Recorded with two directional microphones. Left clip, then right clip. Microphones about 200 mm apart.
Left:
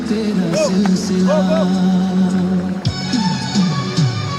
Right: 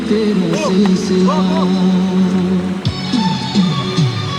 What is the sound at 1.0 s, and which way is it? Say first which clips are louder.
Music: right 1 dB; 35° left (ahead or behind).